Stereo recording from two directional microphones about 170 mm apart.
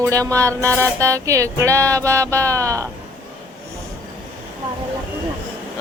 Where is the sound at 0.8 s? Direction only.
15° right (ahead or behind).